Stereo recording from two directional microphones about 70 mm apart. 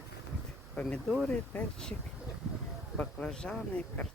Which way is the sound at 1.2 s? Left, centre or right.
Centre.